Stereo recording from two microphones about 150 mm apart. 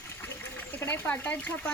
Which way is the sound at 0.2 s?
15° left (ahead or behind).